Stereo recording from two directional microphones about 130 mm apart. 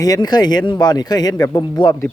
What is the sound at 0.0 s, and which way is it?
Speech, 30° left (ahead or behind).